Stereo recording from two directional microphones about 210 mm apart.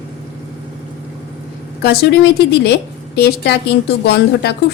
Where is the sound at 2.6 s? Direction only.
50° left (ahead or behind).